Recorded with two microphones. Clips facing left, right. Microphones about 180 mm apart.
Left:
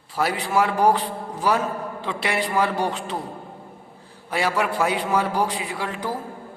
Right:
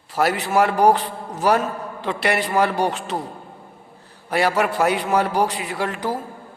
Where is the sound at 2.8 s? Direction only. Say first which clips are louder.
Right 3 dB; 80° right.